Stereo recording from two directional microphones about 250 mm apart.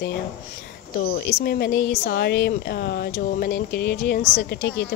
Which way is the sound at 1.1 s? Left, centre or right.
Left.